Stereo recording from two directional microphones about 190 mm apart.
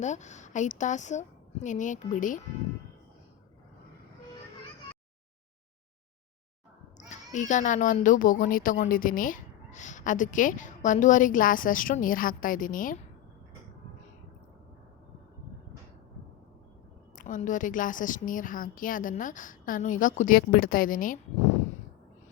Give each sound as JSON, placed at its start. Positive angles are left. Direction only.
{"t": 0.0, "sound": "a woman's voice", "side_deg": 40}
{"t": 7.1, "sound": "a child's voice", "side_deg": 40}
{"t": 17.2, "sound": "a child's voice", "side_deg": 40}